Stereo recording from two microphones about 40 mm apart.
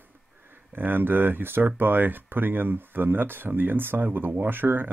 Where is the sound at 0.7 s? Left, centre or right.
Right.